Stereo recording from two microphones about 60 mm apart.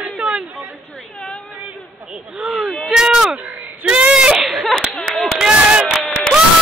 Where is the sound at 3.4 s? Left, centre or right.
Right.